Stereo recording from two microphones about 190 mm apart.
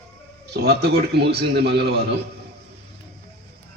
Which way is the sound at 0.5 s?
60° right (ahead or behind).